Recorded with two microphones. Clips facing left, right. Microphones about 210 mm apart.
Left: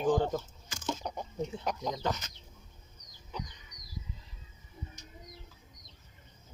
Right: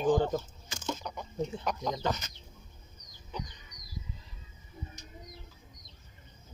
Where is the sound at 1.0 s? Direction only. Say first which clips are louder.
Right 1 dB; 30° left (ahead or behind).